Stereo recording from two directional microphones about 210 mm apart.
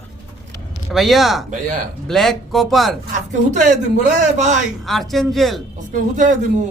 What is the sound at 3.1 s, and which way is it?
A man's voice, 35° right (ahead or behind).